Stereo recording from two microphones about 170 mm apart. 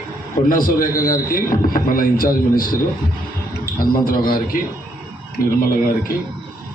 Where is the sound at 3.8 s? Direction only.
55° left (ahead or behind).